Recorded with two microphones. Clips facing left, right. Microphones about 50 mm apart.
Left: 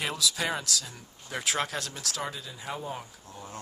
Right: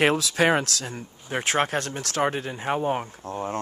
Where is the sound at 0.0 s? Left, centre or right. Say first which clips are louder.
Right 10 dB; right.